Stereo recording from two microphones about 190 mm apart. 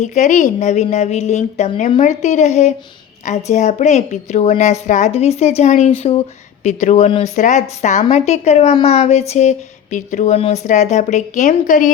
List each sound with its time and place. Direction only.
0.0 s speech: 40° left (ahead or behind)